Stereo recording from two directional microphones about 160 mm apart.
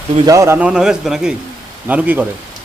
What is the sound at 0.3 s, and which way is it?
A man's voice, 20° right (ahead or behind).